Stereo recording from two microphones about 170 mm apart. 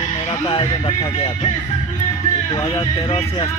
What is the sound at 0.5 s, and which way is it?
Speech, 30° left (ahead or behind).